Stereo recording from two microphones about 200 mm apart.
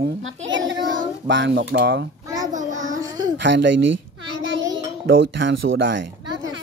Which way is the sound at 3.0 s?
20° right (ahead or behind).